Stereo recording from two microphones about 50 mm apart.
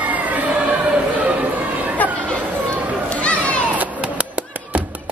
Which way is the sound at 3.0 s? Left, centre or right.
Left.